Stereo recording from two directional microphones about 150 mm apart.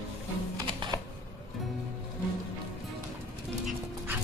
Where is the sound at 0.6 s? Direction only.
30° right (ahead or behind).